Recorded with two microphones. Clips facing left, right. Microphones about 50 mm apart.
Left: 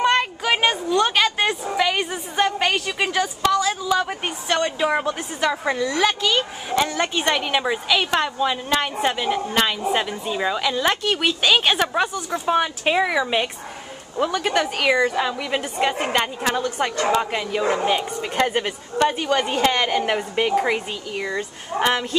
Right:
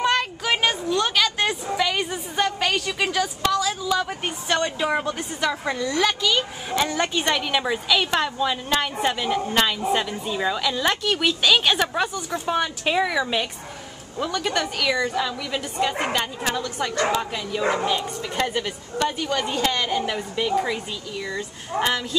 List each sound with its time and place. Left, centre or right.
0.0 s a sound: centre
1.4 s a woman's voice: centre; by 17.3 s left
17.3 s a woman's voice: left
21.7 s a woman's voice: left